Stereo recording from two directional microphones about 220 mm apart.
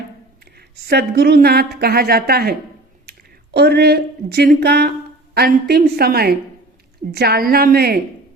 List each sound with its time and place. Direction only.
0.9 s a woman's voice: 45° right (ahead or behind)